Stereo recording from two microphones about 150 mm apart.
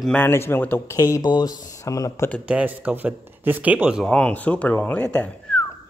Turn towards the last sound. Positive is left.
turn(degrees=10)  # may be behind; listen again after turning